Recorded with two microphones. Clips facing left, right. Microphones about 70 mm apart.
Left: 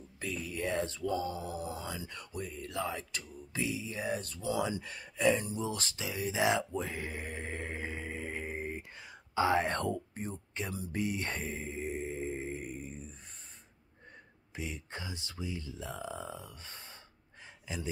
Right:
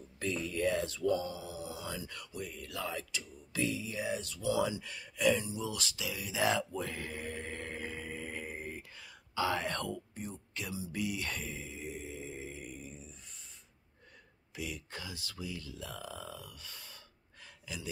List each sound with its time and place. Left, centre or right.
0.2 s a sound: centre
0.5 s a sound: centre
0.7 s speech: left
1.3 s mantra: left
1.9 s speech: left
2.3 s speech: left
3.9 s speech: left
10.9 s mantra: left
14.5 s speech: left